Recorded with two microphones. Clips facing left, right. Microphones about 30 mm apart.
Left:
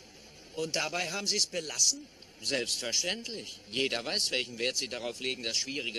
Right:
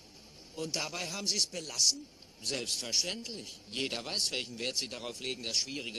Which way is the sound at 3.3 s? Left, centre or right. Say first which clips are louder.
Left 3 dB; left.